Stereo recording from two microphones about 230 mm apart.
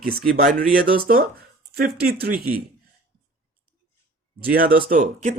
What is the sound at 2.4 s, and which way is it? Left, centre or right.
Speech, centre.